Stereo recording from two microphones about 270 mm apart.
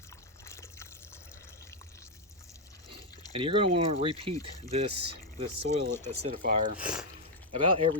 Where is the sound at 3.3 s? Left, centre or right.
Centre.